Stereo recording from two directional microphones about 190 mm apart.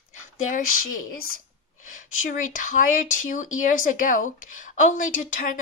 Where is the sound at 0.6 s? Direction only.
90° left.